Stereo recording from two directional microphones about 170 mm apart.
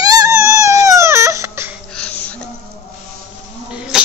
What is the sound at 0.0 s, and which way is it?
Baby cry, 20° right (ahead or behind).